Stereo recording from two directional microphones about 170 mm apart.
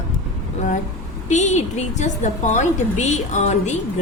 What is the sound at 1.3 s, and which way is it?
A woman's voice, 45° left (ahead or behind).